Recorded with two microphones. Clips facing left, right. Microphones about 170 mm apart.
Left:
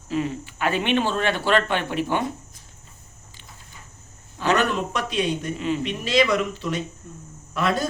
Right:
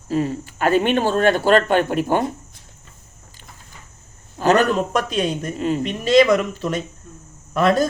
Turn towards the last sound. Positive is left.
turn(degrees=-45)  # may be behind; listen again after turning